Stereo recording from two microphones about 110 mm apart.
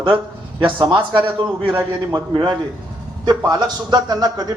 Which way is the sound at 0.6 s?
45° right (ahead or behind).